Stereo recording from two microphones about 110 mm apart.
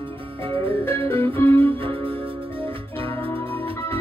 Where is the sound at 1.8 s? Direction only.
55° right (ahead or behind).